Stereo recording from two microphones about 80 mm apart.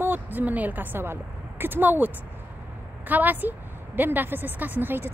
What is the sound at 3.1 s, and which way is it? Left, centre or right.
A woman's voice, right.